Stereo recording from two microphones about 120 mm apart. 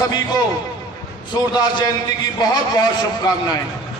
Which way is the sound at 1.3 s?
35° left (ahead or behind).